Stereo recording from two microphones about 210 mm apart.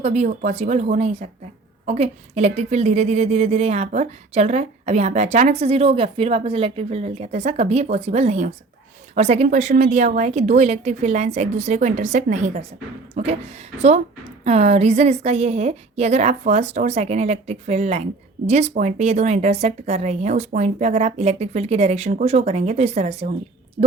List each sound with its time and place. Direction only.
0.0 s a woman's voice: 30° right (ahead or behind)